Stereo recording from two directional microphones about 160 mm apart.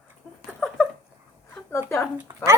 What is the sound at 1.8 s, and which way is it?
Speech, 15° left (ahead or behind).